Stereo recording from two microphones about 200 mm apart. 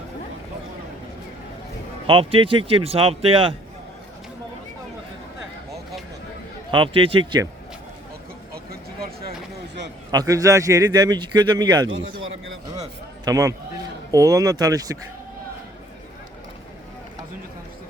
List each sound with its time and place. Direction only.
2.0 s speech: 25° right (ahead or behind)
6.7 s speech: 25° right (ahead or behind)
8.5 s a sound: 50° right (ahead or behind)
10.1 s speech: 15° right (ahead or behind)
13.2 s speech: 15° right (ahead or behind)